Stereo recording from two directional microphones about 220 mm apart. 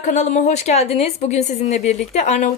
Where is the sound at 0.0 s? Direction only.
35° left (ahead or behind).